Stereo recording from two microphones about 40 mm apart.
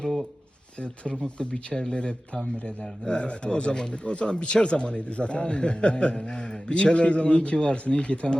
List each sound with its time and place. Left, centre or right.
1.4 s speech: left